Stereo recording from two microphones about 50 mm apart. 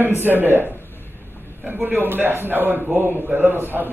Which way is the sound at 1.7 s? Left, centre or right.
Right.